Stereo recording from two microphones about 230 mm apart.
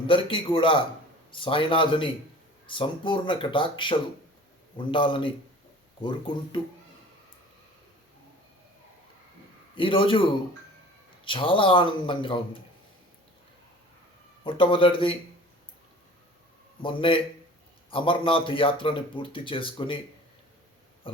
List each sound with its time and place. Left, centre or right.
0.1 s speech: left
9.7 s speech: left
11.3 s speech: left
14.4 s speech: left
16.8 s speech: left